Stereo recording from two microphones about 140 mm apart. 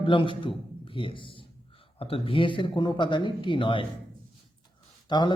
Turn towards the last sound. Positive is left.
turn(degrees=30)  # may be behind; listen again after turning